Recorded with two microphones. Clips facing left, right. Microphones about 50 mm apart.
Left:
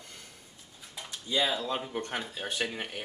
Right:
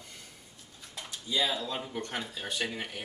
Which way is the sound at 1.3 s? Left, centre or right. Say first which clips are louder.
Left 2 dB; left.